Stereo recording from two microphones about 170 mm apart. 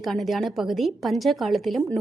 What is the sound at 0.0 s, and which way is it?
A woman's voice, centre (ahead or behind).